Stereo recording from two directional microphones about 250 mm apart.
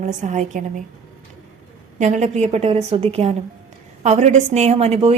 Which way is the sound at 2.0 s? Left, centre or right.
Right.